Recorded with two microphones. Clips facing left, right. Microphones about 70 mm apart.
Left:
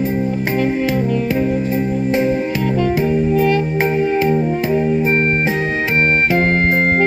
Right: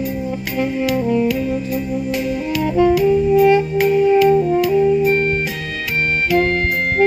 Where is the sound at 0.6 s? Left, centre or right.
Left.